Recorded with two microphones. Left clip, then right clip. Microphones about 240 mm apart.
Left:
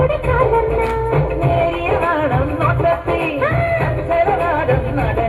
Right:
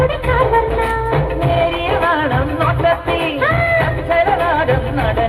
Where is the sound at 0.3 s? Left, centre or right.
Right.